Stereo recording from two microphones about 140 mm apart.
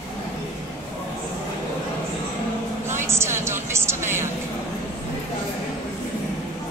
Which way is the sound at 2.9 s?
20° right (ahead or behind).